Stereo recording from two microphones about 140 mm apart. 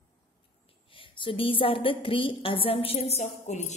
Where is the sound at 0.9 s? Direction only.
40° left (ahead or behind).